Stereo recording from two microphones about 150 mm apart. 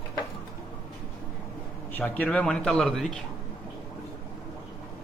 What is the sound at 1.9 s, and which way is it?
A man's voice, 10° left (ahead or behind).